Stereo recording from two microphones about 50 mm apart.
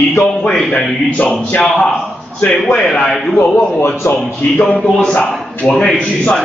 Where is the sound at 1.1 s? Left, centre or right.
Left.